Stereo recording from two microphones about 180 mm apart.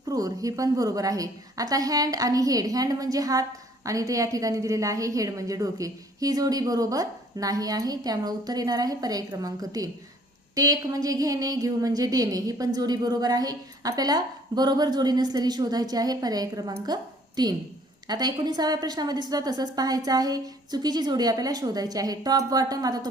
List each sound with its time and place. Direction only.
0.0 s a woman's voice: 20° right (ahead or behind)